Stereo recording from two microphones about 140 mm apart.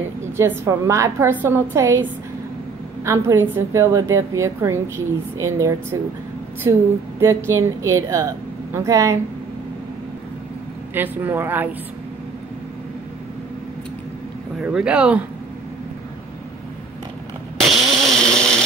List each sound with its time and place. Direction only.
0.4 s a woman's voice: 20° right (ahead or behind)
3.1 s a woman's voice: 20° right (ahead or behind)
11.0 s speech: 15° right (ahead or behind)
14.6 s speech: 5° right (ahead or behind)
17.6 s chainsaw: centre (ahead or behind)